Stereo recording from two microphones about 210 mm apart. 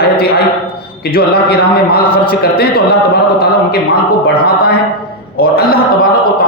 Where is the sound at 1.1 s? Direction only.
45° left (ahead or behind).